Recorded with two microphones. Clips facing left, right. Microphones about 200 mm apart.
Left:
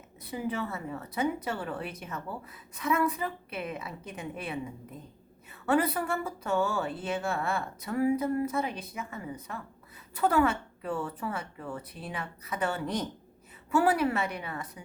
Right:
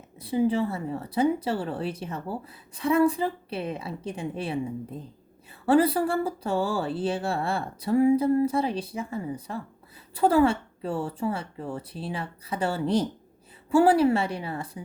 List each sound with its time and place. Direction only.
0.2 s speech: 30° right (ahead or behind)